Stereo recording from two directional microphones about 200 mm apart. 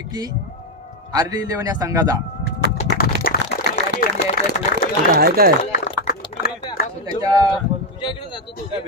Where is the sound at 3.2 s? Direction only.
50° left (ahead or behind).